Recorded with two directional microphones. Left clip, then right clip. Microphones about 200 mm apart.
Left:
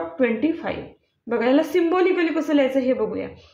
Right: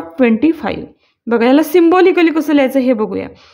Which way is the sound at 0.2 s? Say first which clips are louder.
Right 9 dB; 50° right (ahead or behind).